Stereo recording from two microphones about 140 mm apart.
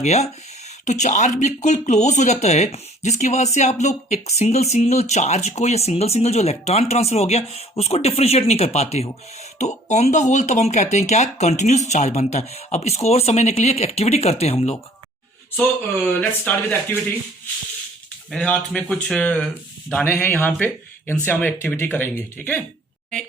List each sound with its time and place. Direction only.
0.0 s speech: 50° left (ahead or behind)
16.1 s speech: 10° left (ahead or behind)
18.3 s speech: 10° left (ahead or behind)